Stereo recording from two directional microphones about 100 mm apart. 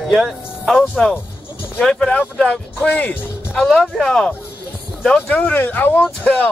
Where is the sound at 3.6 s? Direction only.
5° left (ahead or behind).